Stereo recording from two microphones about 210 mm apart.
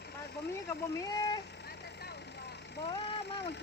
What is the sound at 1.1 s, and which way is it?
Speech, 20° left (ahead or behind).